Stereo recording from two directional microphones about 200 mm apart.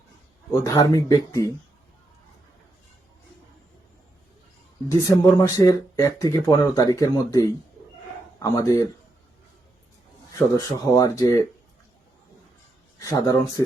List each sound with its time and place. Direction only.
0.5 s speech: 15° left (ahead or behind)
4.9 s speech: 15° left (ahead or behind)
10.9 s speech: 20° left (ahead or behind)
13.0 s speech: 15° left (ahead or behind)